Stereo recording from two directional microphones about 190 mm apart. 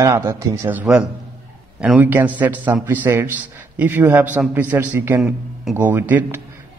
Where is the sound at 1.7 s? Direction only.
5° right (ahead or behind).